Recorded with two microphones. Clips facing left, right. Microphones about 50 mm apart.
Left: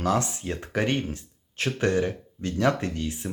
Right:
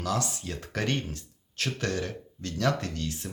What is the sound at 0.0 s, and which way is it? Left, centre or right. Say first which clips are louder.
Speech: left 5 dB; left.